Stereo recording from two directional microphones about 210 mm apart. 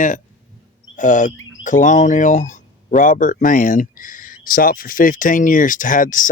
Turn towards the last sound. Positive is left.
turn(degrees=40)  # may be behind; listen again after turning